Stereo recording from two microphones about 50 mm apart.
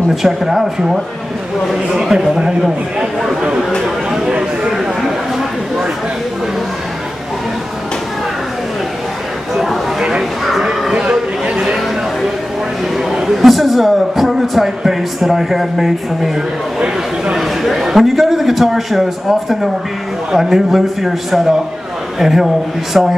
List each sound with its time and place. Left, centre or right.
0.1 s a man's voice: centre
4.1 s a sound: centre
9.6 s a sound: centre
11.1 s chatter: centre
12.9 s a man's voice: centre
17.4 s a man's voice: centre
20.3 s a man's voice: centre